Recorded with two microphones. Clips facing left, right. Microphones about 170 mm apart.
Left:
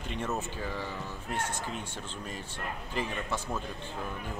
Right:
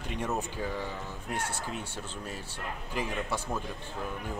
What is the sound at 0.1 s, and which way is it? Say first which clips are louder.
Speech: right 1 dB; 10° right (ahead or behind).